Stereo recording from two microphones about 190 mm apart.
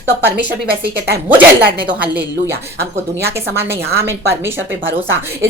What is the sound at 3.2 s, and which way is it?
A woman's voice, 15° right (ahead or behind).